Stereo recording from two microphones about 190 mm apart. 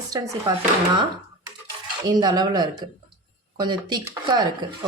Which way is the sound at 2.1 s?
20° right (ahead or behind).